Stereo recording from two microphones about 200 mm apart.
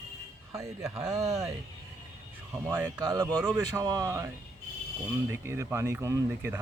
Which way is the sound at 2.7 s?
10° right (ahead or behind).